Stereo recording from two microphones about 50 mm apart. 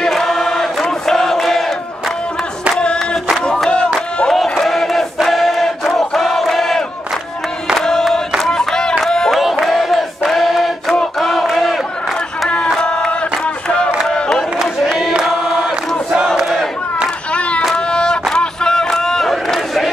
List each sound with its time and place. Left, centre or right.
0.1 s chant: centre
2.8 s a sound: centre
3.4 s crowd: centre
4.3 s crowd: centre
7.7 s choir: centre
8.4 s crowd: centre
9.3 s battle cry: centre
11.1 s crowd: centre
12.7 s chant: centre
14.0 s crowd: centre
14.9 s choir: centre
15.2 s chant: centre
17.3 s a sound: left
18.3 s battle cry: centre